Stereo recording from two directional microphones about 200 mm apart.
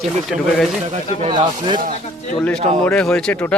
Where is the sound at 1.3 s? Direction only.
25° right (ahead or behind).